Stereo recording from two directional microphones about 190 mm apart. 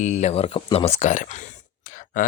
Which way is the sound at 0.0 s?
35° left (ahead or behind).